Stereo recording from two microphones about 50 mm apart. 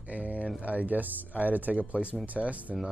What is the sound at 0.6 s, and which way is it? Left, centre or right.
Speech, right.